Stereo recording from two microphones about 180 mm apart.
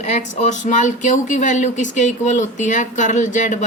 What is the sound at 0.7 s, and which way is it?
Speech, 45° left (ahead or behind).